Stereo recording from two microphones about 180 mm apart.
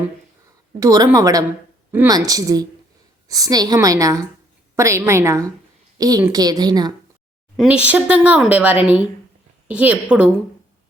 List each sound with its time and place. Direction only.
0.8 s a woman's voice: 20° right (ahead or behind)
7.5 s speech: 5° right (ahead or behind)